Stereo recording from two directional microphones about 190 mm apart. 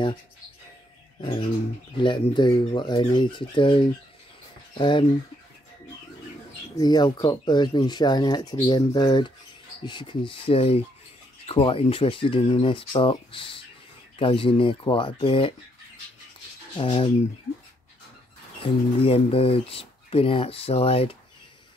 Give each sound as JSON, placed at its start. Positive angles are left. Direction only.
{"t": 2.0, "sound": "speech", "side_deg": 25}
{"t": 6.8, "sound": "speech", "side_deg": 20}
{"t": 16.7, "sound": "speech", "side_deg": 30}
{"t": 18.6, "sound": "speech", "side_deg": 30}